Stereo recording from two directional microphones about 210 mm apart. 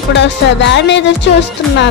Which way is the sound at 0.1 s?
55° left (ahead or behind).